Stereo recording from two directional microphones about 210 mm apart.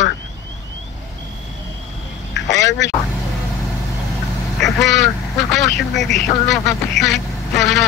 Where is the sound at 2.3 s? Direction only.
60° left (ahead or behind).